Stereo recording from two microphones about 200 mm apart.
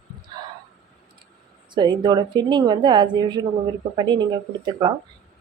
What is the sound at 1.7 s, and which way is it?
A woman's voice, 20° right (ahead or behind).